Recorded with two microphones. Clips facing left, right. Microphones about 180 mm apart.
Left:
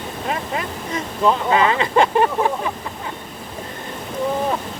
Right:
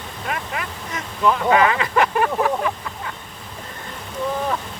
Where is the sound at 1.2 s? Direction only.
25° left (ahead or behind).